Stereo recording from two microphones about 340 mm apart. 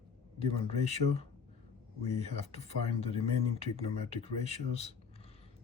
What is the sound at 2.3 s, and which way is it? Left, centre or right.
Speech, centre.